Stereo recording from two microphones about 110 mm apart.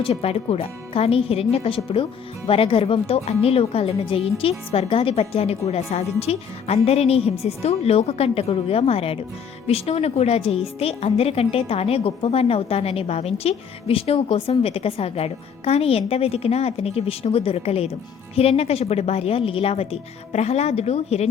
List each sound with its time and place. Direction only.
0.0 s a woman's voice: 65° left (ahead or behind)